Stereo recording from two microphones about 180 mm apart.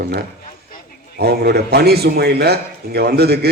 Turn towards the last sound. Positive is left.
turn(degrees=-65)  # may be behind; listen again after turning